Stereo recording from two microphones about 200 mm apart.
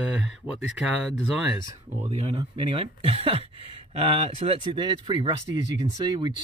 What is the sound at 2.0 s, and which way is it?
Speech, 30° right (ahead or behind).